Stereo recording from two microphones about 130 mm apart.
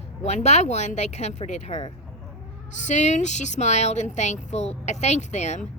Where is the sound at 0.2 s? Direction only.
60° left (ahead or behind).